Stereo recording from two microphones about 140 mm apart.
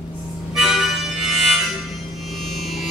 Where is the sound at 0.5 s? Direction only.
Centre (ahead or behind).